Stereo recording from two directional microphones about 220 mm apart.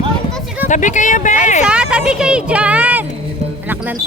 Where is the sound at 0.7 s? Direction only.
35° left (ahead or behind).